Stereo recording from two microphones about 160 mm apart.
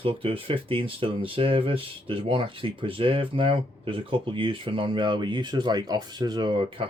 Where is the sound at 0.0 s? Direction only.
35° right (ahead or behind).